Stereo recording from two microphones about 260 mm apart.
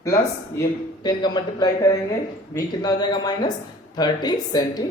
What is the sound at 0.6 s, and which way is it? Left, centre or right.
Speech, centre.